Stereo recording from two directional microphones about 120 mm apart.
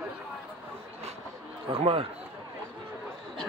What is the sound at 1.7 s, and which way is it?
Speech, 50° right (ahead or behind).